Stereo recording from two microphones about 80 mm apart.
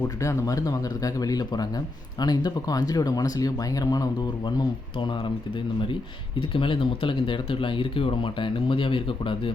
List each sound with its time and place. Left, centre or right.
0.0 s speech: left
6.5 s speech: left